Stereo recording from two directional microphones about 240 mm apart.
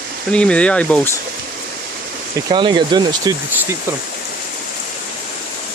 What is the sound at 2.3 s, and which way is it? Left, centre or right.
Speech, centre.